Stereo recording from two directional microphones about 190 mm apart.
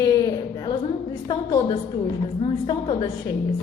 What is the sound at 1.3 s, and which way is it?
A woman's voice, 25° left (ahead or behind).